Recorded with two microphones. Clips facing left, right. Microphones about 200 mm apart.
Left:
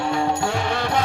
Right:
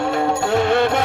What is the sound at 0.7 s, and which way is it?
Music, 55° right (ahead or behind).